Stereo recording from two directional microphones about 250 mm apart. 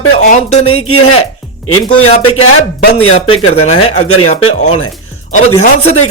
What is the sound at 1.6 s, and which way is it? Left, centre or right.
Speech, left.